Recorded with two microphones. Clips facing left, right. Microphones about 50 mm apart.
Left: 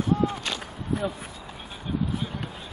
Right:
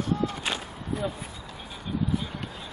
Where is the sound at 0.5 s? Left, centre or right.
Centre.